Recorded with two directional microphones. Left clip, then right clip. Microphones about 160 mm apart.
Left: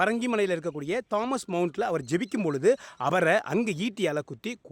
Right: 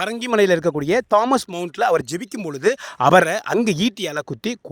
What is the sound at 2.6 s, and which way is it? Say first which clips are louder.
Speech: right 8 dB; 60° right (ahead or behind).